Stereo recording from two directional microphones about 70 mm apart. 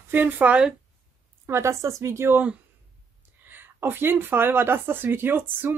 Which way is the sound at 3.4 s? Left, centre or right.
Right.